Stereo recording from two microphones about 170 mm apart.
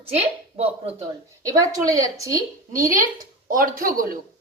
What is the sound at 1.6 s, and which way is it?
A woman's voice, 20° right (ahead or behind).